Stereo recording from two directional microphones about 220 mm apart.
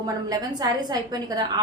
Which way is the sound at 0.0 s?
15° right (ahead or behind).